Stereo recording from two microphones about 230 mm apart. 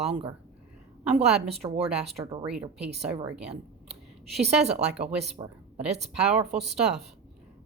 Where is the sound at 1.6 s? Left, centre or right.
Right.